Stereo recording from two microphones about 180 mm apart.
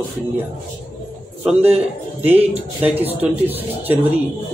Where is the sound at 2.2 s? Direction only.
35° right (ahead or behind).